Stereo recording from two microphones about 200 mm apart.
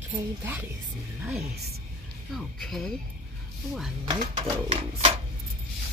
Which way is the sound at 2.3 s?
Centre (ahead or behind).